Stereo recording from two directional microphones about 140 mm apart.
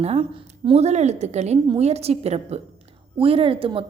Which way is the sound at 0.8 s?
55° right (ahead or behind).